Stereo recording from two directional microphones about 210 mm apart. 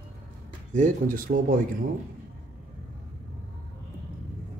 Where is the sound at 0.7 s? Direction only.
40° right (ahead or behind).